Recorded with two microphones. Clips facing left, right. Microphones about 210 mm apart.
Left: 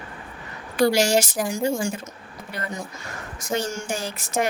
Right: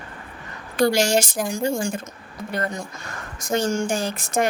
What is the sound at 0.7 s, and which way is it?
Speech, 5° left (ahead or behind).